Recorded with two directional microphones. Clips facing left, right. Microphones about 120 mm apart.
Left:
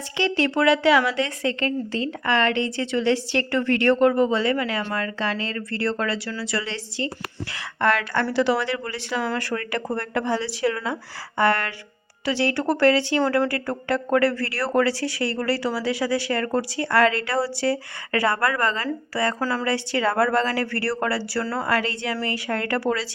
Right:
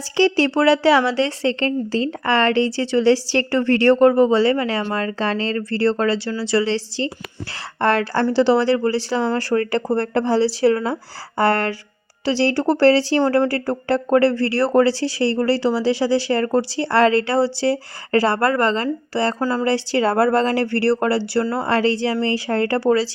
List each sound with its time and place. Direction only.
0.2 s speech: 35° right (ahead or behind)